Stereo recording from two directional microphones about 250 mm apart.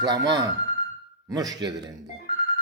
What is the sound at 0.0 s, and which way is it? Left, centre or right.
Speech, centre.